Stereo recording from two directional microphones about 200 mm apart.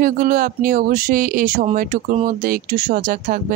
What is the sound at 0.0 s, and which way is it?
Speech, 45° right (ahead or behind).